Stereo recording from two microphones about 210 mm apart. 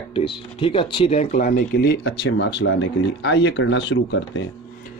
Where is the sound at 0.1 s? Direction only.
25° left (ahead or behind); by 4.4 s 60° left (ahead or behind).